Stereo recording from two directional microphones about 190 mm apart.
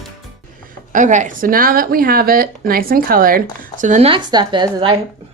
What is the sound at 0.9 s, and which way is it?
Speech, 40° right (ahead or behind).